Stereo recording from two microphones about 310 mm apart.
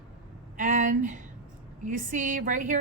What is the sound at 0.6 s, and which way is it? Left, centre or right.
A woman's voice, right.